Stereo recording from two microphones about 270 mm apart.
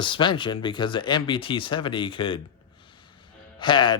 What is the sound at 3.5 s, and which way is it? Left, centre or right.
Speech, centre.